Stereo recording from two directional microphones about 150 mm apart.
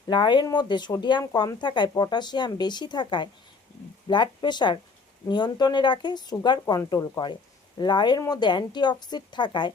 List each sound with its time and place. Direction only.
0.1 s speech: 30° left (ahead or behind)